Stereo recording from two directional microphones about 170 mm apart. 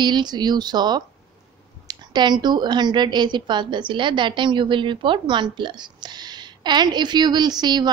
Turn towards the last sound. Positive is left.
turn(degrees=-25)  # may be behind; listen again after turning